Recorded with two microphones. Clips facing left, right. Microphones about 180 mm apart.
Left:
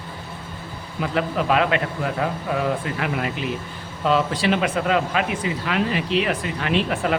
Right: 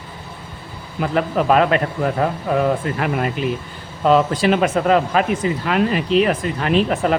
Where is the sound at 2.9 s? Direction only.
40° right (ahead or behind).